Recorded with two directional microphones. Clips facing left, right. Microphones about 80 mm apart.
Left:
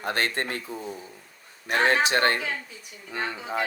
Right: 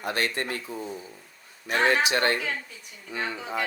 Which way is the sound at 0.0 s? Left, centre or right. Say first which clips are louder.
Left 1 dB; left.